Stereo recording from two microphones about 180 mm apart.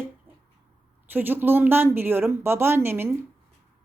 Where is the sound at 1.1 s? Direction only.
10° right (ahead or behind).